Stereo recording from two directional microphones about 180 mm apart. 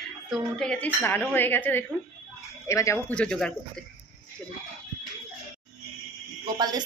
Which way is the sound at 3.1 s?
5° left (ahead or behind).